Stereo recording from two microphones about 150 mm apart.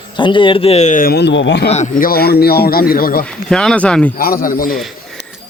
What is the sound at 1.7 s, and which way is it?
Speech, 60° left (ahead or behind).